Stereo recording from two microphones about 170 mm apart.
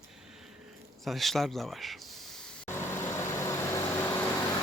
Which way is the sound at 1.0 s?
Centre (ahead or behind).